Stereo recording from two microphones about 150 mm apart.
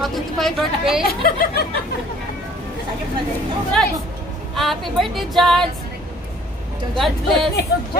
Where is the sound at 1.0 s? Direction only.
85° left.